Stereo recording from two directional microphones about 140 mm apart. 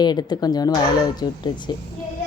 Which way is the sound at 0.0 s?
30° left (ahead or behind).